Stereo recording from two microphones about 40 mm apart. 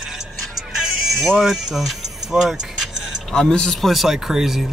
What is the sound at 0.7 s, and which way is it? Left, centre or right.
Music, centre.